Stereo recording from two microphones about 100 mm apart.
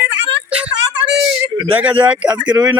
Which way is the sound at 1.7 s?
15° right (ahead or behind).